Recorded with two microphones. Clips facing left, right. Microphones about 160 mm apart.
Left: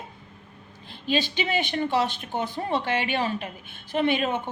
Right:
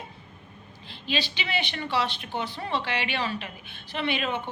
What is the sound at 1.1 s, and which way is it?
A woman's voice, 50° left (ahead or behind).